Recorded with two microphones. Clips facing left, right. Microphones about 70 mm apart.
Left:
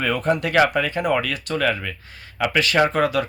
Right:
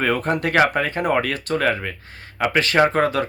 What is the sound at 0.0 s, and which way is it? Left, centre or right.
Speech, right.